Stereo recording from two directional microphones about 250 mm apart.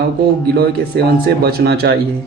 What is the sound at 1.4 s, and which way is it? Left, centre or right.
Speech, right.